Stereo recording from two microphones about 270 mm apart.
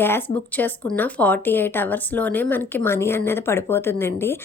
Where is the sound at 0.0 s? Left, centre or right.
Centre.